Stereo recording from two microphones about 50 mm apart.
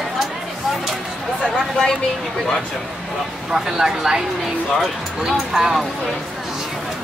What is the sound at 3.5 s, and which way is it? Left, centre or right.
Speech, centre.